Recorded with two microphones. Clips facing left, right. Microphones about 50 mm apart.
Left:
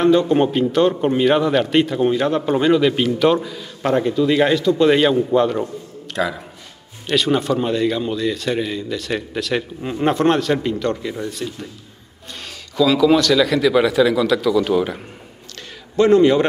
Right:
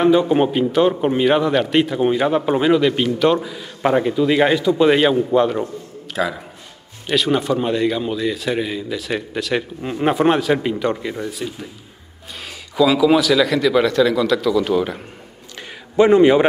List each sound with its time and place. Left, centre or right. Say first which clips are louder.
0.0 s a man's voice: even; centre
16.0 s a man's voice: right 1 dB; centre